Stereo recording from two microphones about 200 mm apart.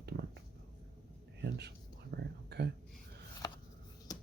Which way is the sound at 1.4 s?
55° right (ahead or behind).